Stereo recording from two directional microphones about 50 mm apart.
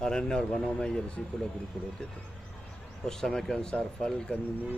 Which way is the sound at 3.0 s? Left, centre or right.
Centre.